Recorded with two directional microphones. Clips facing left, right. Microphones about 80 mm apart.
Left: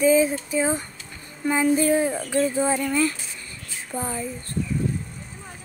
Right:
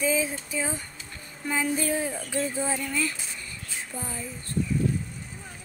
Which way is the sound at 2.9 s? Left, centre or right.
Left.